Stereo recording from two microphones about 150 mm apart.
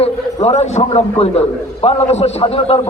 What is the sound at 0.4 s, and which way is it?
A man's voice, 50° left (ahead or behind).